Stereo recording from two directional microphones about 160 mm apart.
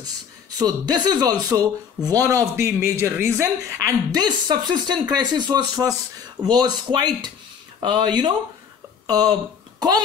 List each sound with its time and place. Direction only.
0.6 s a child's voice: 25° right (ahead or behind)